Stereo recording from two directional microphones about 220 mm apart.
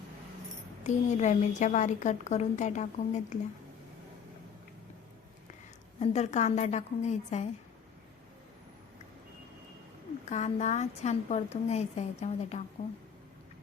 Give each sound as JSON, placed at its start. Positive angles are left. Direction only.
{"t": 0.9, "sound": "a woman's voice", "side_deg": 30}
{"t": 6.0, "sound": "a woman's voice", "side_deg": 30}
{"t": 10.2, "sound": "a woman's voice", "side_deg": 30}